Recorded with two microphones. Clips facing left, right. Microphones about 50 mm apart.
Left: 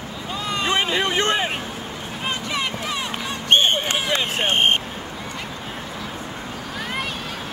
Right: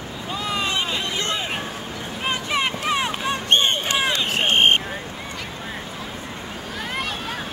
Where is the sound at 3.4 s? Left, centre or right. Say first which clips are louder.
Left 3 dB; left.